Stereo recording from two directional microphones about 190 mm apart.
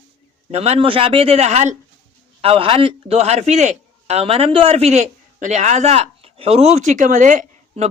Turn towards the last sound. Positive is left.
turn(degrees=-40)  # may be behind; listen again after turning